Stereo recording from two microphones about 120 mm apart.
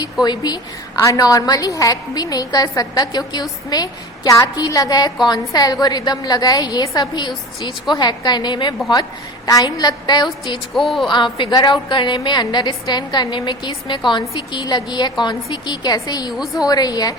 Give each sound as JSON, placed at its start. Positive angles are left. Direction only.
{"t": 0.0, "sound": "a woman's voice", "side_deg": 35}
{"t": 10.8, "sound": "speech", "side_deg": 0}
{"t": 11.1, "sound": "a woman's voice", "side_deg": 40}
{"t": 16.4, "sound": "speech", "side_deg": 0}
{"t": 16.6, "sound": "a woman's voice", "side_deg": 35}